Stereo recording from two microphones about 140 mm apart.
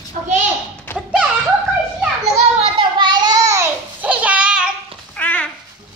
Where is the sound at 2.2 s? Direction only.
50° right (ahead or behind).